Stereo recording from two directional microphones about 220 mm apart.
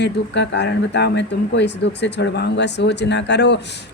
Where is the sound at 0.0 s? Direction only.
50° left (ahead or behind).